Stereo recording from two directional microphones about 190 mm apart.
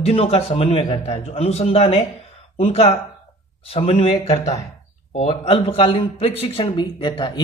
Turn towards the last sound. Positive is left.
turn(degrees=25)  # may be behind; listen again after turning